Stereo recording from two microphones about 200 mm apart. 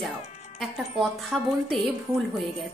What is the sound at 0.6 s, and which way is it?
A woman's voice, centre (ahead or behind).